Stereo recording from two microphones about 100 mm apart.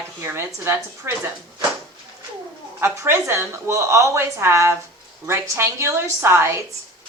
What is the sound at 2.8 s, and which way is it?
A woman's voice, 25° right (ahead or behind).